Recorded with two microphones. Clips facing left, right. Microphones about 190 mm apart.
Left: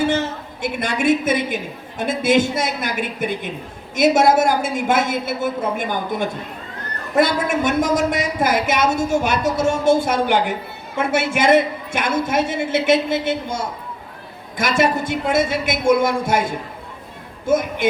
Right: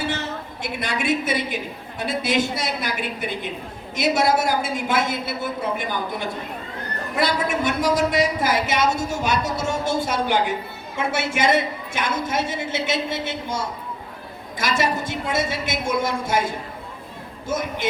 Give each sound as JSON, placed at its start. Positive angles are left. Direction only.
{"t": 0.6, "sound": "a woman's voice", "side_deg": 50}
{"t": 14.6, "sound": "a woman's voice", "side_deg": 55}